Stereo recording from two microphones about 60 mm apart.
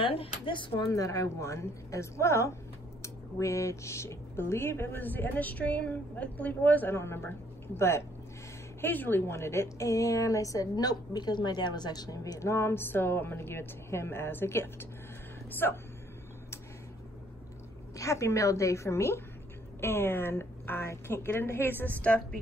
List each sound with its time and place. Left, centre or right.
0.7 s a woman's voice: left
5.0 s a woman's voice: left
6.9 s a woman's voice: left
8.8 s a woman's voice: left
9.3 s a woman's voice: left
17.9 s a woman's voice: left